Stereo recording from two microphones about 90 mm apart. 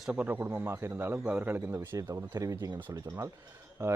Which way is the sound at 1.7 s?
30° right (ahead or behind).